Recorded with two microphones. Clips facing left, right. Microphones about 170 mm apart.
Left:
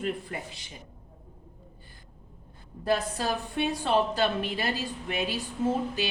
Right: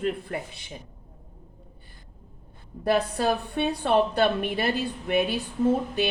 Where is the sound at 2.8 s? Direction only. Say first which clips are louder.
Right 4 dB; 65° right (ahead or behind).